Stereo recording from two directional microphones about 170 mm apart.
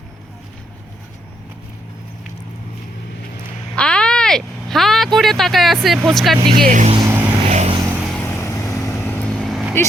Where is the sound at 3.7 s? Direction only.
5° left (ahead or behind).